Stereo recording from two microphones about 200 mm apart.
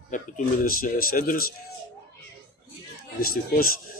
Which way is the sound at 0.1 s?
40° left (ahead or behind).